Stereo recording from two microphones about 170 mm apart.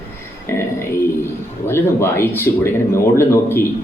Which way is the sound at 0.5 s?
15° left (ahead or behind).